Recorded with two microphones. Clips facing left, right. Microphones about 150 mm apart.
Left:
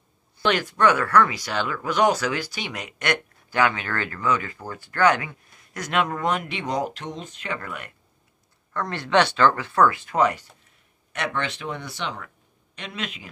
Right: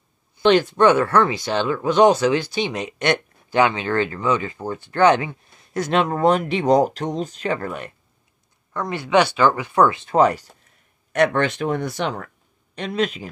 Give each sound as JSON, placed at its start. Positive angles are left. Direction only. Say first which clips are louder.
{"t": 0.4, "sound": "speech", "louder": "right 6 dB", "side_deg": -25}
{"t": 8.7, "sound": "speech", "louder": "right 3 dB", "side_deg": -10}
{"t": 11.1, "sound": "speech", "louder": "right 10 dB", "side_deg": -45}